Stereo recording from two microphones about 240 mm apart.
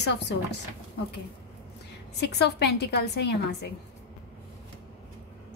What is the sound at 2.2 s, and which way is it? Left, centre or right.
Speech, left.